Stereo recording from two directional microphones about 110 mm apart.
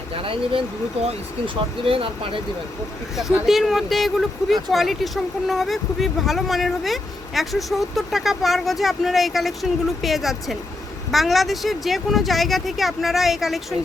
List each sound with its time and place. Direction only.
0.1 s speech: 55° right (ahead or behind)
1.9 s speech: 55° right (ahead or behind)
3.2 s speech: centre (ahead or behind)